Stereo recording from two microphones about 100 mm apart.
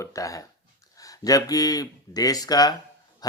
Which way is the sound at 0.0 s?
35° left (ahead or behind).